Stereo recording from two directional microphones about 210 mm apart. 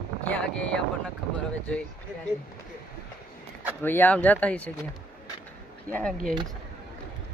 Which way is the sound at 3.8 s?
10° left (ahead or behind).